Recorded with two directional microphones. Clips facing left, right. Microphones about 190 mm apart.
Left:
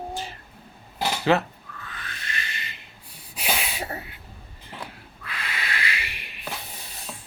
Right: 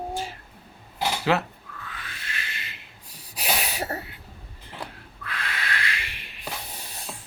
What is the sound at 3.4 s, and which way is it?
Sneeze, 40° right (ahead or behind).